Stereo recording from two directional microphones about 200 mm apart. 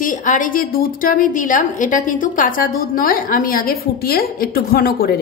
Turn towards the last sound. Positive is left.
turn(degrees=50)  # may be behind; listen again after turning